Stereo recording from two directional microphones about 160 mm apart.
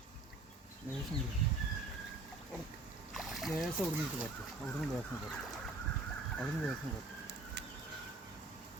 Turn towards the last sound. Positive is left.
turn(degrees=-90)